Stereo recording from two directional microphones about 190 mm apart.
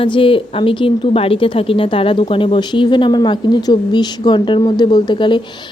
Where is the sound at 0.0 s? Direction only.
25° left (ahead or behind).